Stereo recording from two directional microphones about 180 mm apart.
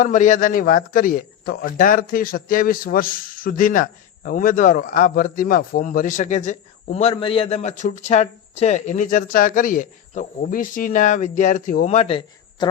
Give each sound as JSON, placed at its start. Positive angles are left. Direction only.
{"t": 0.0, "sound": "a man's voice", "side_deg": 45}
{"t": 11.9, "sound": "a man's voice", "side_deg": 30}